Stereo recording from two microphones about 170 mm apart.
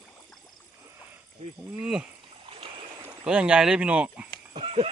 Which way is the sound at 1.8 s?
5° right (ahead or behind).